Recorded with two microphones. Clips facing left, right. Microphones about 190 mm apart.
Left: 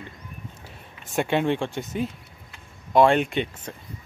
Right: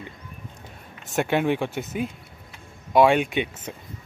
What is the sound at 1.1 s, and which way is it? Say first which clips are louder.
Speech: right 1 dB; 5° right (ahead or behind).